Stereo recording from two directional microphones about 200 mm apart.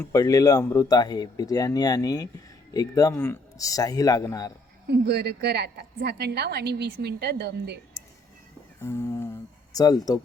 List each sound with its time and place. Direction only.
0.0 s speech: 15° left (ahead or behind)
4.9 s a woman's voice: 55° right (ahead or behind)
8.8 s speech: 15° left (ahead or behind)